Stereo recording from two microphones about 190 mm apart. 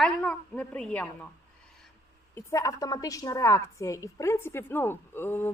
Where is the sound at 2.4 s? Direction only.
15° left (ahead or behind).